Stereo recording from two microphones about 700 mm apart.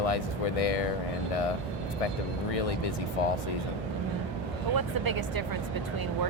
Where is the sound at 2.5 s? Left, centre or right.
Left.